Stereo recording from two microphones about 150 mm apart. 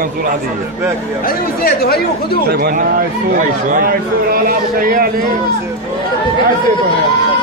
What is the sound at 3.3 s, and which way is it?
A man's voice, 60° right (ahead or behind).